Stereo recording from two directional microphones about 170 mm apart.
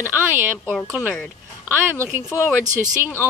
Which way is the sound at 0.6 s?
Centre (ahead or behind).